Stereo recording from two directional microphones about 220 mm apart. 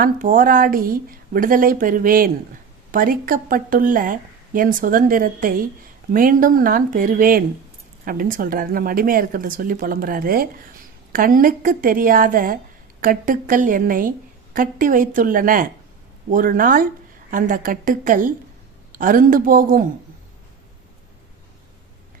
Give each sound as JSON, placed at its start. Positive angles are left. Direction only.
{"t": 0.0, "sound": "a woman's voice", "side_deg": -40}